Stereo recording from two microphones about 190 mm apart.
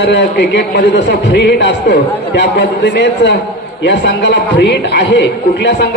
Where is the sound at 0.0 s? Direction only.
65° left (ahead or behind).